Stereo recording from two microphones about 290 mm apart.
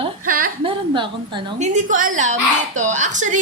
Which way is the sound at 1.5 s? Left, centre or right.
Right.